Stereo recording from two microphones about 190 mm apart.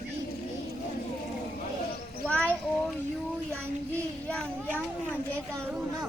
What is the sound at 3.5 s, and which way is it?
Child singing, 5° left (ahead or behind).